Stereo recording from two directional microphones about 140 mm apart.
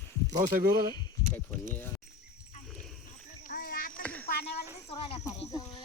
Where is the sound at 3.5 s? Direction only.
90° left.